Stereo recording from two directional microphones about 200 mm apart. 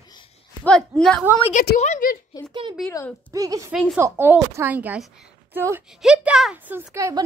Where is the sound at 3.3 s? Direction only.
15° right (ahead or behind).